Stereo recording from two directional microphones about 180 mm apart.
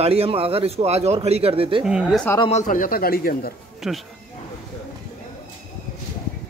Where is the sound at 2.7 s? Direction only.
50° left (ahead or behind).